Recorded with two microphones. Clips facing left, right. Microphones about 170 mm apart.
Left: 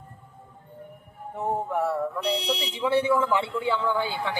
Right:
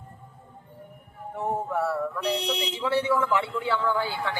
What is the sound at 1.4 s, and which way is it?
Speech, 20° left (ahead or behind).